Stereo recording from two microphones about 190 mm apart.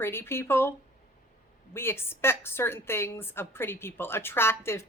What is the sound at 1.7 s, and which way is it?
A woman's voice, 10° left (ahead or behind).